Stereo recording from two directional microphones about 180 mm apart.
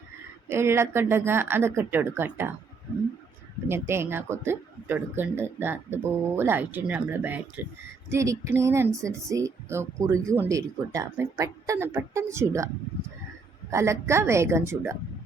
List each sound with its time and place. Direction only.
0.4 s speech: 15° right (ahead or behind)
3.7 s speech: 15° right (ahead or behind)